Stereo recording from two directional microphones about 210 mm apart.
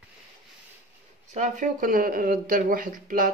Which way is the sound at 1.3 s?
35° right (ahead or behind).